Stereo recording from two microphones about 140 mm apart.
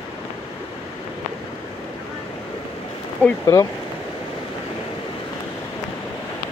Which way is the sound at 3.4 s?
25° left (ahead or behind).